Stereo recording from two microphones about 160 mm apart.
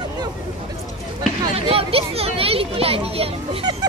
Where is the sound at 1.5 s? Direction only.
35° right (ahead or behind).